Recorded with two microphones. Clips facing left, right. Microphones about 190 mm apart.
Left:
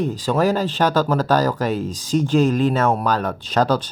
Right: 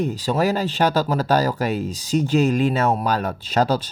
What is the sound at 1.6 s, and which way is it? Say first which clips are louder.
Speech: left 1 dB; 10° right (ahead or behind).